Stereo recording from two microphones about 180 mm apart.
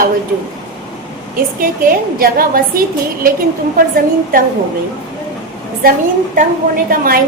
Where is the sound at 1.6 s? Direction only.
50° right (ahead or behind).